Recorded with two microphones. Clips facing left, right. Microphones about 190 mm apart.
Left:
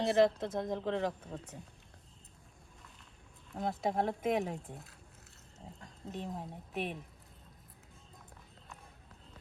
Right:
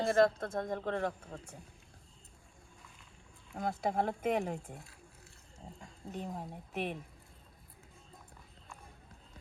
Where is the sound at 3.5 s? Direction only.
Centre (ahead or behind).